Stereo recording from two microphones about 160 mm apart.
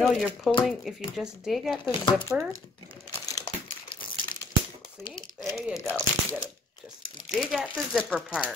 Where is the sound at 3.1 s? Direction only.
20° left (ahead or behind).